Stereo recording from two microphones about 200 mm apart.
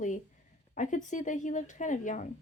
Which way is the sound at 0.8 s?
40° left (ahead or behind).